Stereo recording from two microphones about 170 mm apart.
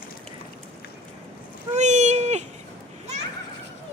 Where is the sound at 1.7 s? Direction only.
45° right (ahead or behind).